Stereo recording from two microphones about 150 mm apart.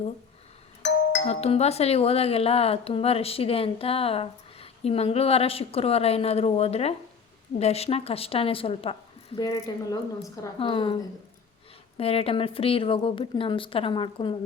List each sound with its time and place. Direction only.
1.2 s speech: 45° left (ahead or behind)
9.4 s speech: 25° left (ahead or behind)